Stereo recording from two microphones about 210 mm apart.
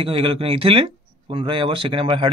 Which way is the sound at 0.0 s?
25° right (ahead or behind).